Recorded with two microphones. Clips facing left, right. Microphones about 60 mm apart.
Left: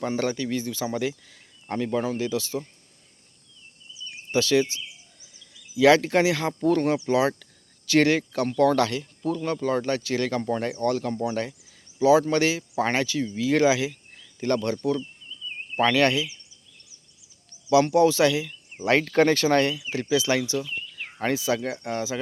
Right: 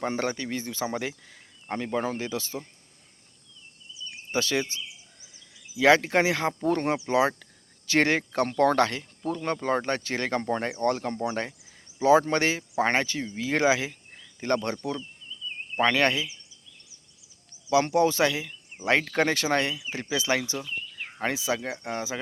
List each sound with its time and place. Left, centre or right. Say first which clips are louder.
0.0 s speech: left 2 dB; right
2.0 s speech: left 2 dB; right
4.3 s speech: left 6 dB; right
5.8 s speech: left 2 dB; right
14.8 s speech: left 6 dB; centre
17.7 s speech: left 4 dB; right
19.9 s speech: left 4 dB; right